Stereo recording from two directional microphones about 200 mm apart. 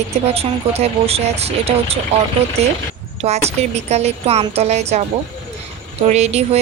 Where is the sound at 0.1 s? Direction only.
30° right (ahead or behind).